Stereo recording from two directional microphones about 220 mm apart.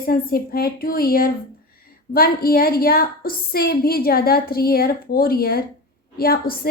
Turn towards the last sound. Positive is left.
turn(degrees=40)  # may be behind; listen again after turning